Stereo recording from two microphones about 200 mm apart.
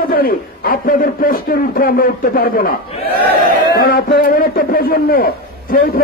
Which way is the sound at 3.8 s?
45° left (ahead or behind).